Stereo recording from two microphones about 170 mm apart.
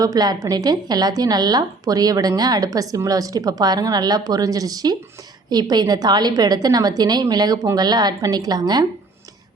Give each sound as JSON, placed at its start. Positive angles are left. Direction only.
{"t": 0.0, "sound": "a woman's voice", "side_deg": -25}